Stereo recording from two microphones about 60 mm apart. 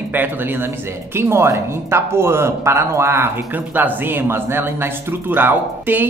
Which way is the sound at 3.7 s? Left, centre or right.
Right.